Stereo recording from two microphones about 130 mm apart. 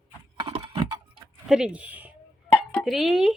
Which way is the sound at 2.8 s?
Centre (ahead or behind).